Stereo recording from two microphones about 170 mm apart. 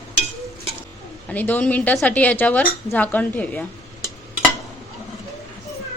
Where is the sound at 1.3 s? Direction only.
10° left (ahead or behind).